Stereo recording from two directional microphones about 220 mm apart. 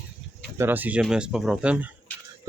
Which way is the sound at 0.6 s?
10° right (ahead or behind).